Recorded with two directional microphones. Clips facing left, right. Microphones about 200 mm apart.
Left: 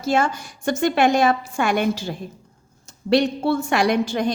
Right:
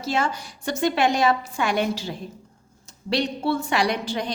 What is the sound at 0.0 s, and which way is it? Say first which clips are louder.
A woman's voice: left 4 dB; 50° left (ahead or behind).